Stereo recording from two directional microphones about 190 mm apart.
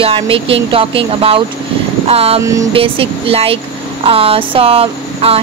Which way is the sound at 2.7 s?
30° right (ahead or behind).